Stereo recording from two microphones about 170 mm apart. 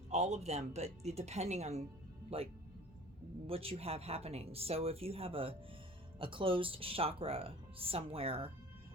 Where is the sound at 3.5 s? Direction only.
35° right (ahead or behind).